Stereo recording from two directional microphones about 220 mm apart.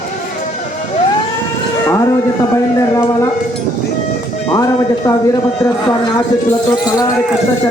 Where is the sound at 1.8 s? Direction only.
15° left (ahead or behind).